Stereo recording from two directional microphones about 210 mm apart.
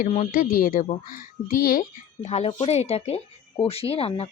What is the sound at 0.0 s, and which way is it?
Speech, 35° left (ahead or behind).